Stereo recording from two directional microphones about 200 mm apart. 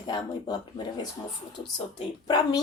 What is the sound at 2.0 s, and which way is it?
Speech, 20° left (ahead or behind).